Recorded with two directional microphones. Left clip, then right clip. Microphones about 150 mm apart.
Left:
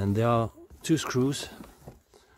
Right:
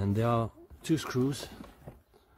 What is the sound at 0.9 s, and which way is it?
Speech, 50° left (ahead or behind).